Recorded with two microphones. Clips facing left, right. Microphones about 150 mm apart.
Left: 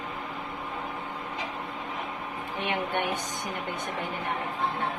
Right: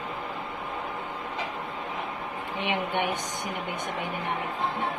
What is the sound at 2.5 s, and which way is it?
Speech, 15° right (ahead or behind).